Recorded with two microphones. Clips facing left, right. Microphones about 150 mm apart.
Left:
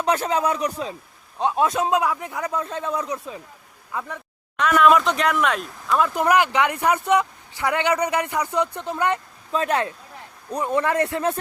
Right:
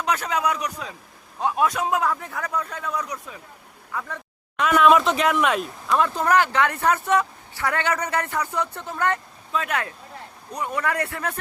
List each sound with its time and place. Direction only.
0.0 s a man's voice: 30° left (ahead or behind)
4.6 s speech: centre (ahead or behind)
6.1 s speech: 15° left (ahead or behind)
9.5 s a man's voice: 35° left (ahead or behind)